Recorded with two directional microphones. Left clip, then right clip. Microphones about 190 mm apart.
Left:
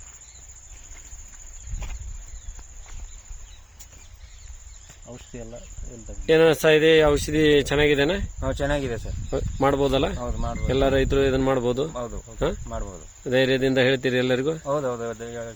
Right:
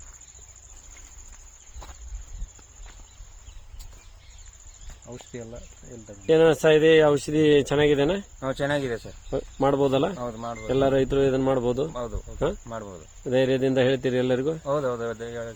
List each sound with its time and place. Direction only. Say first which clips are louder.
5.0 s speech: right 1 dB; 35° right (ahead or behind)
6.2 s speech: left 1 dB; centre (ahead or behind)
8.4 s speech: even; 15° right (ahead or behind)
9.3 s speech: left 1 dB; centre (ahead or behind)
10.7 s speech: left 1 dB; centre (ahead or behind)